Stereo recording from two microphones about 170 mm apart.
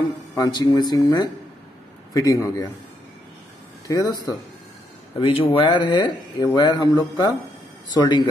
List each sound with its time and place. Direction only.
0.4 s speech: 25° left (ahead or behind)
3.8 s speech: 20° left (ahead or behind)
5.2 s speech: 35° left (ahead or behind)